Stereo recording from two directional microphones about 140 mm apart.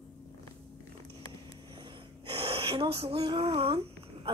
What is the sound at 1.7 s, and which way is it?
Gasp, 40° right (ahead or behind).